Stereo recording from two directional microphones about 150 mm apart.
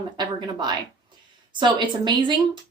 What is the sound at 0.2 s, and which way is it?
A woman's voice, 30° right (ahead or behind).